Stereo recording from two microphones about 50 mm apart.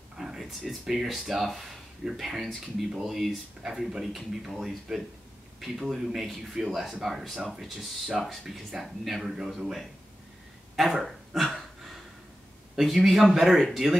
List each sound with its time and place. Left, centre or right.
0.2 s a man's voice: centre
11.0 s a sound: centre
12.7 s a man's voice: centre